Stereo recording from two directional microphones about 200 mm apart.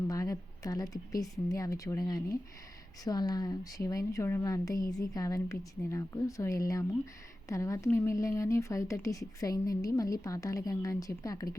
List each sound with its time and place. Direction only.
0.1 s speech: 15° left (ahead or behind)